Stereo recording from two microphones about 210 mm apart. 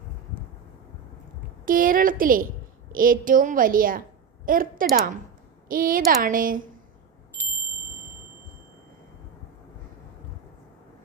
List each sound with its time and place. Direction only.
1.6 s a woman's voice: 40° right (ahead or behind)